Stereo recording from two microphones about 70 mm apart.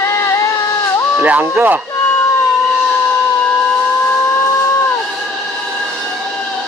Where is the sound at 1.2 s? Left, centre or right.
Right.